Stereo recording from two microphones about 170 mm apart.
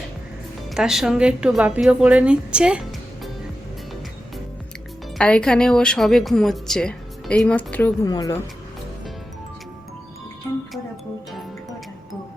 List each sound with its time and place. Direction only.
0.7 s speech: centre (ahead or behind)
5.1 s speech: 5° left (ahead or behind)
8.0 s a woman's voice: 20° left (ahead or behind)